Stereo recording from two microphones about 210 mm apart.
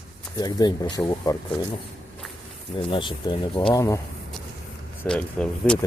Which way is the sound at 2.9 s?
25° left (ahead or behind).